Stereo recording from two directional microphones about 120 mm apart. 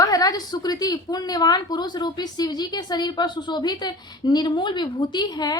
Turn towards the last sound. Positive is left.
turn(degrees=35)  # may be behind; listen again after turning